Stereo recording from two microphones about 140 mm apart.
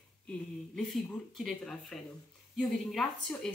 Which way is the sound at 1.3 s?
Centre (ahead or behind).